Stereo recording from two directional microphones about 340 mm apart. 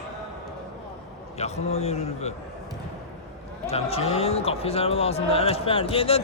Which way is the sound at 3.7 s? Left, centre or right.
Centre.